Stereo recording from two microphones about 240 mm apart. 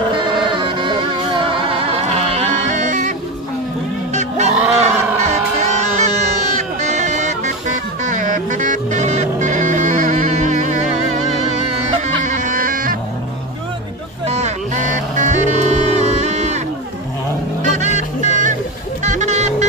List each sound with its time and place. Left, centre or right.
0.5 s music: right
12.3 s bagpipes: right
14.2 s music: right
17.6 s music: right